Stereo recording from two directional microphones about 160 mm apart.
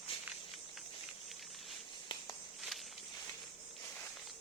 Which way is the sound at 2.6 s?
Centre (ahead or behind).